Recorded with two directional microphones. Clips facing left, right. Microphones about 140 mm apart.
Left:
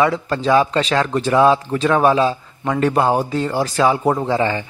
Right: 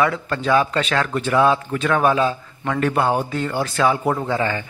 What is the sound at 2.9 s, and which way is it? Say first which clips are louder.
A man's voice: left 3 dB; 35° left (ahead or behind).